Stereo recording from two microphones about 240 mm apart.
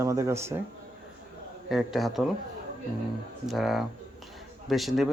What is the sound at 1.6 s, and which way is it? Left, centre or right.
Speech, centre.